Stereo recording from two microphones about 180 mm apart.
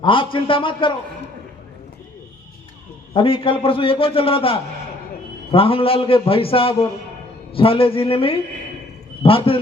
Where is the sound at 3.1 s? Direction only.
30° left (ahead or behind).